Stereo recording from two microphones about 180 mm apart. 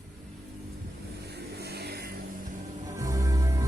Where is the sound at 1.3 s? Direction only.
65° right (ahead or behind).